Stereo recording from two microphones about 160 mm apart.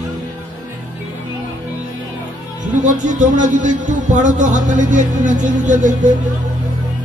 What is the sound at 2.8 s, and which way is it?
A man's voice, 50° right (ahead or behind).